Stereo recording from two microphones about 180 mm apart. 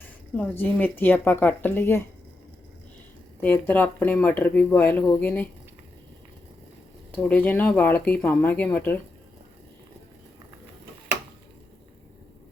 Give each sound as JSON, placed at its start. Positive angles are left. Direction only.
{"t": 0.3, "sound": "speech", "side_deg": 10}
{"t": 3.4, "sound": "speech", "side_deg": 10}
{"t": 7.2, "sound": "speech", "side_deg": 10}